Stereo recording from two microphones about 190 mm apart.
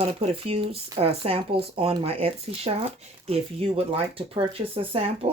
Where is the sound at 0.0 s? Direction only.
30° right (ahead or behind).